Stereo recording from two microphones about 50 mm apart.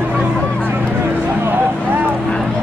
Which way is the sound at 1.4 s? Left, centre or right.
Right.